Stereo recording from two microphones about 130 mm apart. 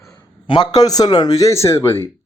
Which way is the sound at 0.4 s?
35° left (ahead or behind).